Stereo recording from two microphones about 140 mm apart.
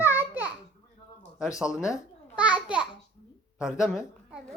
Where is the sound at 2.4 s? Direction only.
10° right (ahead or behind).